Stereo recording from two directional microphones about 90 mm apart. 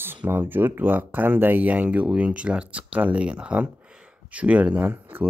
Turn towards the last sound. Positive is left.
turn(degrees=-20)  # may be behind; listen again after turning